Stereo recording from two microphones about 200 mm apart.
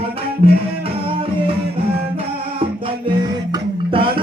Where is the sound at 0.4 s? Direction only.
30° right (ahead or behind).